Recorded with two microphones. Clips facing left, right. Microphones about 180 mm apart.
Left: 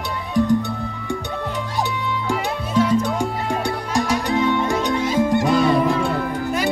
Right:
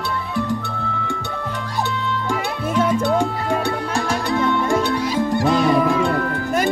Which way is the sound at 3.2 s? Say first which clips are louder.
Right 2 dB; 15° left (ahead or behind).